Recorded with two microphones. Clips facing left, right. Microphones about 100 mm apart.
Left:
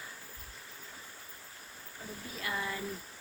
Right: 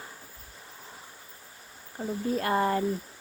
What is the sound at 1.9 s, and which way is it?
Speech, 50° right (ahead or behind).